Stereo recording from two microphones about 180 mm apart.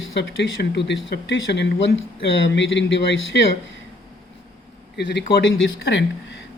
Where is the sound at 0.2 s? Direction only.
70° left (ahead or behind).